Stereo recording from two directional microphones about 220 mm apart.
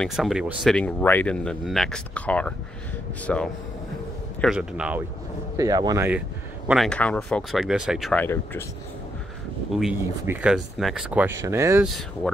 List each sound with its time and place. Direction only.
0.0 s speech: centre (ahead or behind)
5.6 s speech: 15° right (ahead or behind)
6.7 s speech: centre (ahead or behind)
9.7 s speech: centre (ahead or behind)